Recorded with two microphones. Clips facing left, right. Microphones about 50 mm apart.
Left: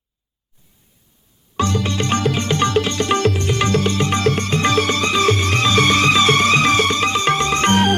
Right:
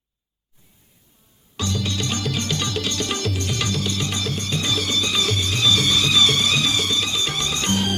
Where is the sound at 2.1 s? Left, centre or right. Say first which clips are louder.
Left 7 dB; left.